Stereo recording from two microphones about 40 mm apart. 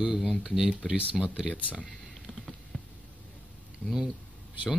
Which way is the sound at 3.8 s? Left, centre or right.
Left.